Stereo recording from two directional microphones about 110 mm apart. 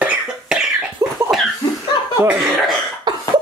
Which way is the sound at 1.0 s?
30° right (ahead or behind).